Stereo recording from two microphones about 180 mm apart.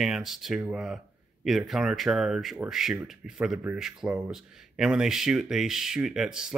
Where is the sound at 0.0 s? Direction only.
Centre (ahead or behind).